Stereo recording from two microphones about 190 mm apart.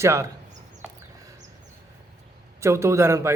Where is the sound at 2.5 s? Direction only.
15° right (ahead or behind).